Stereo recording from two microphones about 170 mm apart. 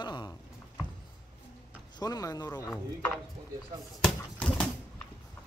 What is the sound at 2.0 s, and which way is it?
Speech, 25° left (ahead or behind).